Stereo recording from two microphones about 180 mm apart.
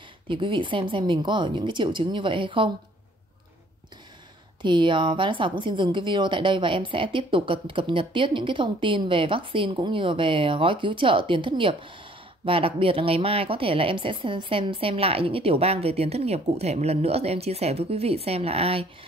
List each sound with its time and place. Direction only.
0.3 s a woman's voice: 25° right (ahead or behind)
4.6 s a woman's voice: 25° right (ahead or behind)